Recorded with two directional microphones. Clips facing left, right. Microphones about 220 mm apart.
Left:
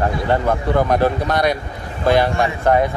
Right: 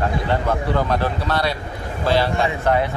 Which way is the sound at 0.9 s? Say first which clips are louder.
Left 4 dB; 15° left (ahead or behind).